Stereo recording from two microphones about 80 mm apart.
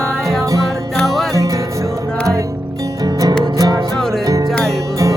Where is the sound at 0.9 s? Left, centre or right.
Centre.